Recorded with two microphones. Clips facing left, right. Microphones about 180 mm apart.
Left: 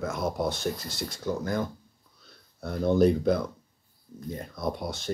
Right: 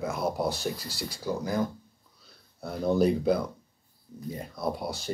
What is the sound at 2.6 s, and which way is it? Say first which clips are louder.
Speech: left 2 dB; 5° right (ahead or behind).